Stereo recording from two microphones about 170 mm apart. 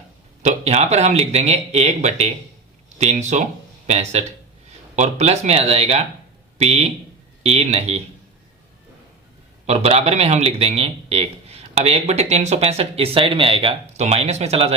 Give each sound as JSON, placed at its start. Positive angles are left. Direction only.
{"t": 0.4, "sound": "a man's voice", "side_deg": -40}
{"t": 9.6, "sound": "a man's voice", "side_deg": -35}